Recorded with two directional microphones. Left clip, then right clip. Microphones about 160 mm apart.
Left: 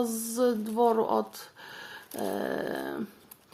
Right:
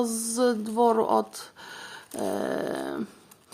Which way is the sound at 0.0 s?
30° right (ahead or behind).